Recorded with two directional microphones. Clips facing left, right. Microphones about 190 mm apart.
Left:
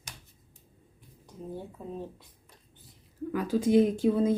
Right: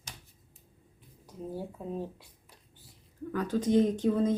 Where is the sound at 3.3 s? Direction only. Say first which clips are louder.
Left 3 dB; 10° left (ahead or behind).